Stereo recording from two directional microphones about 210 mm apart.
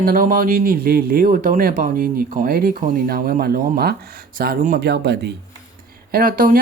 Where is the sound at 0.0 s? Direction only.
40° right (ahead or behind).